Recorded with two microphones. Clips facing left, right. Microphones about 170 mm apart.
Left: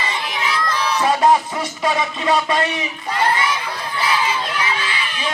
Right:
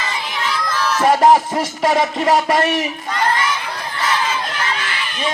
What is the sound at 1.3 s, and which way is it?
Music, 90° right.